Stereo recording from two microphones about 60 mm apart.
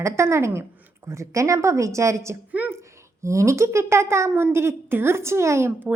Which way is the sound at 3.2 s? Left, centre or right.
Right.